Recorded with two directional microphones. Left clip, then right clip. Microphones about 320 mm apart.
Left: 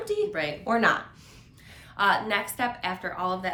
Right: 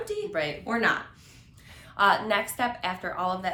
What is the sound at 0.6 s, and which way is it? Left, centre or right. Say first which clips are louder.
Speech: left 4 dB; centre.